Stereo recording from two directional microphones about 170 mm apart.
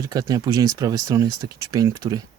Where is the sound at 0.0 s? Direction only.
20° right (ahead or behind).